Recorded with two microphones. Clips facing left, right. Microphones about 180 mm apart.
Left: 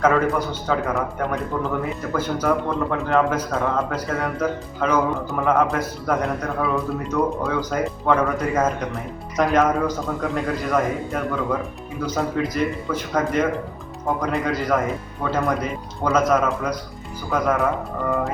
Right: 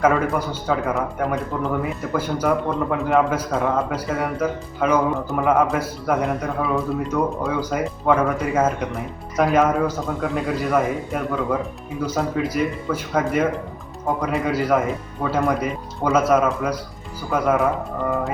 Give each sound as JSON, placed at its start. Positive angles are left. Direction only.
{"t": 0.0, "sound": "a man's voice", "side_deg": -10}